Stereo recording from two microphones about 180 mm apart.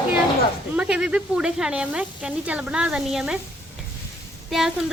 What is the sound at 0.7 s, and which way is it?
Speech, 5° right (ahead or behind).